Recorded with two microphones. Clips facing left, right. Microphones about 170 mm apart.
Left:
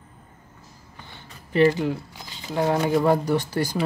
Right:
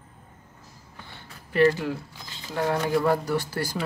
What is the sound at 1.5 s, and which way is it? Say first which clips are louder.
Speech: left 2 dB; 20° left (ahead or behind).